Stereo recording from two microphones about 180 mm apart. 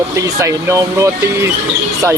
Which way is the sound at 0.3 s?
15° right (ahead or behind).